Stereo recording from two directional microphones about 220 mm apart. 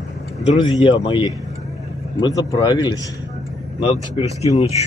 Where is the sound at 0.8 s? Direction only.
20° left (ahead or behind).